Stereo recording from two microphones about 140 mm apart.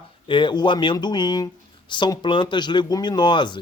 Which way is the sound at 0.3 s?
35° left (ahead or behind).